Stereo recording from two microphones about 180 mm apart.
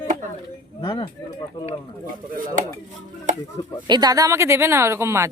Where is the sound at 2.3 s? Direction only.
50° right (ahead or behind).